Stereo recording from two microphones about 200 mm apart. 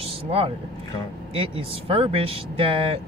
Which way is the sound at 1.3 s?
30° right (ahead or behind).